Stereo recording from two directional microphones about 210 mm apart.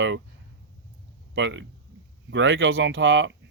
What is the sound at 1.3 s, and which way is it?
Speech, 60° right (ahead or behind).